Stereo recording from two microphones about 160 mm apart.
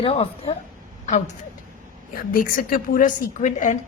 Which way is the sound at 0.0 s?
35° left (ahead or behind).